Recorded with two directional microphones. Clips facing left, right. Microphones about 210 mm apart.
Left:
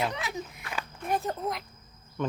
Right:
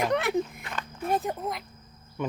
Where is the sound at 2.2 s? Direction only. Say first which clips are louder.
Even; 10° right (ahead or behind).